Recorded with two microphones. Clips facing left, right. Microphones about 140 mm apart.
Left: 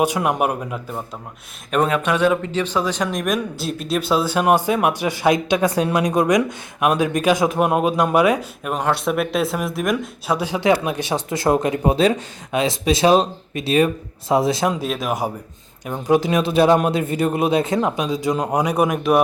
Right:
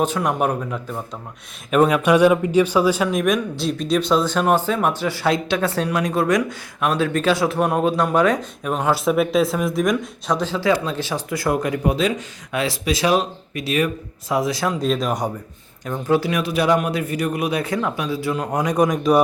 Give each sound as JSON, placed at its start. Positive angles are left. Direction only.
{"t": 0.0, "sound": "speech", "side_deg": 10}
{"t": 1.7, "sound": "speech", "side_deg": -5}
{"t": 14.8, "sound": "speech", "side_deg": 5}
{"t": 15.9, "sound": "speech", "side_deg": 15}